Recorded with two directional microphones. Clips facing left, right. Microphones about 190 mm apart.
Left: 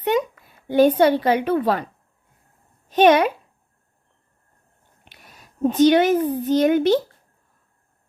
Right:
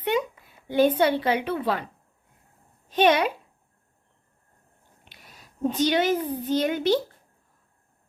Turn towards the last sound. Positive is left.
turn(degrees=50)  # may be behind; listen again after turning